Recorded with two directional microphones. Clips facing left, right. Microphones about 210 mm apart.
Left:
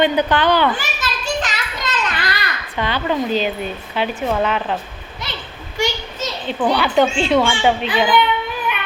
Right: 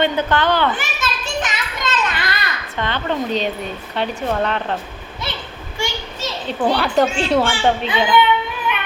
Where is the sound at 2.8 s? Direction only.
10° left (ahead or behind).